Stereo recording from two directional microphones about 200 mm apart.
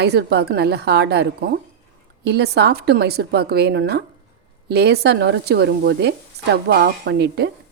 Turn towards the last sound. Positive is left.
turn(degrees=-55)  # may be behind; listen again after turning